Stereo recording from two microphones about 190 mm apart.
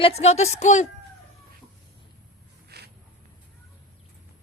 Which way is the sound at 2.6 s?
60° right (ahead or behind).